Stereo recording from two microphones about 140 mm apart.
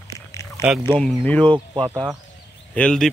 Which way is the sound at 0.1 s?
20° left (ahead or behind).